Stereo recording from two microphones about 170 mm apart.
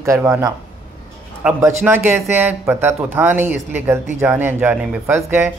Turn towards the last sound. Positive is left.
turn(degrees=-15)  # may be behind; listen again after turning